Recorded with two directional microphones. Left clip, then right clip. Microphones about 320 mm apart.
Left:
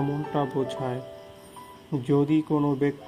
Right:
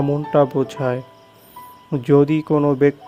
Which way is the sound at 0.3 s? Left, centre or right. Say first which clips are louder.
Right 11 dB; right.